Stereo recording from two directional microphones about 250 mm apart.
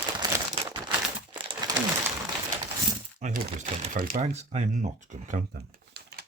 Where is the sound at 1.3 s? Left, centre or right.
Centre.